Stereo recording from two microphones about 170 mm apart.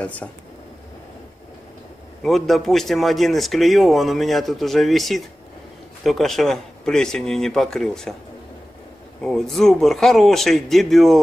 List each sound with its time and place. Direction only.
0.0 s speech: 5° left (ahead or behind)
2.2 s speech: centre (ahead or behind)
9.2 s speech: centre (ahead or behind)